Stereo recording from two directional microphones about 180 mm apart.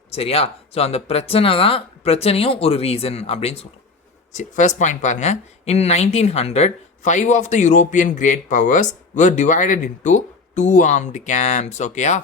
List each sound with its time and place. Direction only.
0.1 s speech: 35° left (ahead or behind)